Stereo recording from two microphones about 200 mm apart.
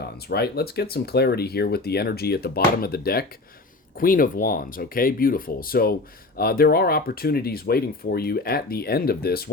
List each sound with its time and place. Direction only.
0.3 s speech: 55° left (ahead or behind)